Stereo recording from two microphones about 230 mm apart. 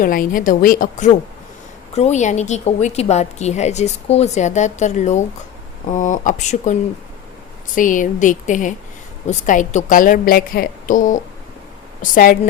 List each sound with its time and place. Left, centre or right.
0.0 s a woman's voice: left
7.8 s a woman's voice: left